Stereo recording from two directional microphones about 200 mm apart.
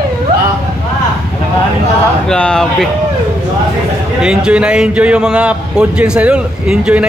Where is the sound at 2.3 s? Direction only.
5° left (ahead or behind).